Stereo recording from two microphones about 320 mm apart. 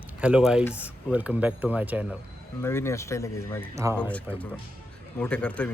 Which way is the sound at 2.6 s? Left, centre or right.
Centre.